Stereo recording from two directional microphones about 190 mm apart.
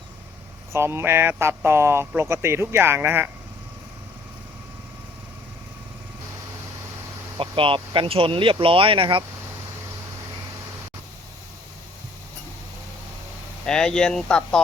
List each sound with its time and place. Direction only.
0.7 s speech: 15° right (ahead or behind)
7.3 s speech: 25° right (ahead or behind)
13.7 s speech: 5° left (ahead or behind)